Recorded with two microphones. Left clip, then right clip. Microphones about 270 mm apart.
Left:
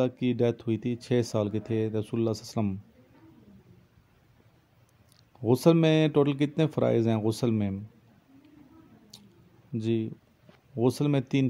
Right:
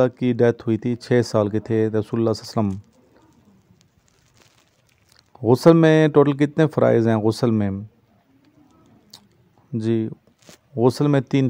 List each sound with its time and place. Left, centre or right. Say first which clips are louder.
0.0 s speech: right 9 dB; right
5.1 s speech: right 8 dB; right
9.1 s a sound: right 6 dB; right
9.7 s speech: right 7 dB; right